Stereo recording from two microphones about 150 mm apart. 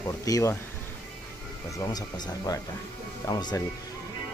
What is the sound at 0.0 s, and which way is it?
Speech, 20° left (ahead or behind).